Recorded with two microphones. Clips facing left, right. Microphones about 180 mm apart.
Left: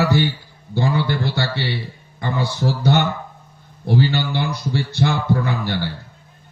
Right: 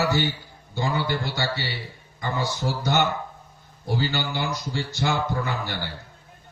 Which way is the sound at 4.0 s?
60° left (ahead or behind).